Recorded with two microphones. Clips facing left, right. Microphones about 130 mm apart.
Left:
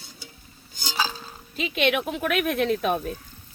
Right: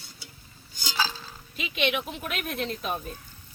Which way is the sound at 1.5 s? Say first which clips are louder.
Left 4 dB; 45° left (ahead or behind).